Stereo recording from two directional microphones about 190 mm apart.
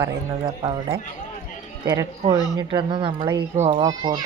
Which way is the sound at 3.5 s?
35° right (ahead or behind).